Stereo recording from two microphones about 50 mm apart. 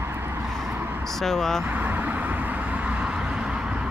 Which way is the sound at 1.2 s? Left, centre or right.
Centre.